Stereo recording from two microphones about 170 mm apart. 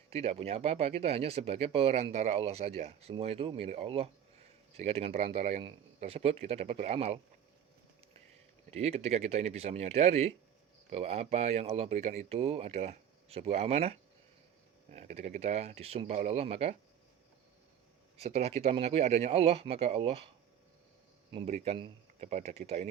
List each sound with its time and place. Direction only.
0.1 s speech: 35° right (ahead or behind)
8.7 s speech: 40° right (ahead or behind)
18.2 s speech: 35° right (ahead or behind)
21.3 s speech: 40° right (ahead or behind)